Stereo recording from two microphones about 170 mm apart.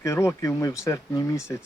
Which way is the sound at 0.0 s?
15° left (ahead or behind).